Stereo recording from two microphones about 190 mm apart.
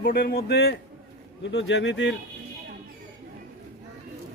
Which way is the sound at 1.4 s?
70° left (ahead or behind).